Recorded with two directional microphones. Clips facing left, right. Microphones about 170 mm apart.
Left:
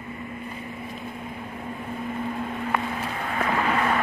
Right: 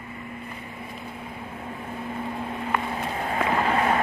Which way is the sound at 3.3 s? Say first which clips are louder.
Right 1 dB; 30° right (ahead or behind).